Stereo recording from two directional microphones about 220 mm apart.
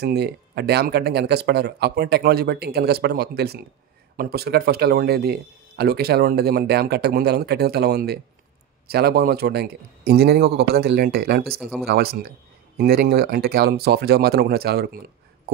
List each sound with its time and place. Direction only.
0.0 s speech: 45° right (ahead or behind)